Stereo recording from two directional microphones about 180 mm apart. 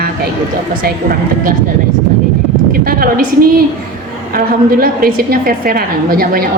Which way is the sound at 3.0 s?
55° right (ahead or behind).